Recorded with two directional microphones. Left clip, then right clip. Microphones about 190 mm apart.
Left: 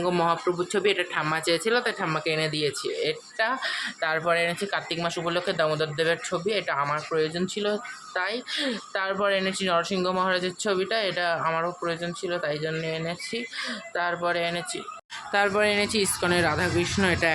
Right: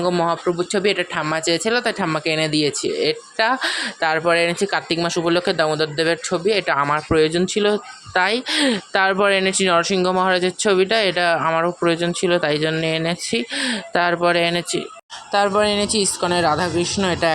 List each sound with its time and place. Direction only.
0.0 s a man's voice: 20° right (ahead or behind); by 14.8 s 35° right (ahead or behind)
15.3 s speech: 20° right (ahead or behind)